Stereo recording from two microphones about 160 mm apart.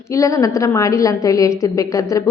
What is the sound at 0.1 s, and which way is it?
A woman's voice, 20° left (ahead or behind).